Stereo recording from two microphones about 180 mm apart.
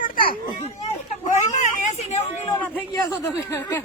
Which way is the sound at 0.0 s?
55° left (ahead or behind).